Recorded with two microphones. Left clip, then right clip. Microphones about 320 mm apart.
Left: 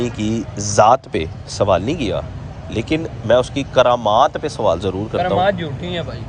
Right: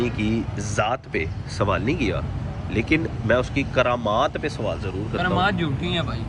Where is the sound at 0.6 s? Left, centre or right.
Left.